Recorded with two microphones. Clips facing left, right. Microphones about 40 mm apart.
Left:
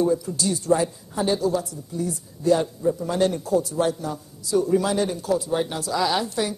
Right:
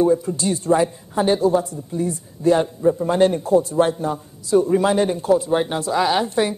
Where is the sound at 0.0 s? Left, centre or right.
Right.